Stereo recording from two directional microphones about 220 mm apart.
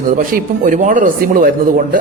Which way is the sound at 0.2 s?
40° right (ahead or behind).